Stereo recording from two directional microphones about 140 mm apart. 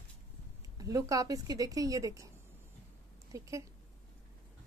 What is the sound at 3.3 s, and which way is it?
Speech, 20° right (ahead or behind).